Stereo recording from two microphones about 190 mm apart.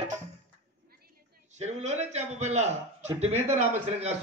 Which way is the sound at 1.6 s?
35° right (ahead or behind).